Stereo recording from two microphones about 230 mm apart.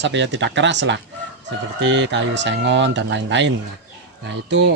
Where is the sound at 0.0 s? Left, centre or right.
Right.